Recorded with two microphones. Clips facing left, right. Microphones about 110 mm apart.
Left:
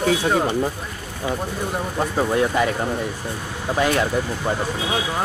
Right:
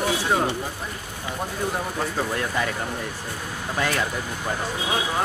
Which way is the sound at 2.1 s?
20° left (ahead or behind).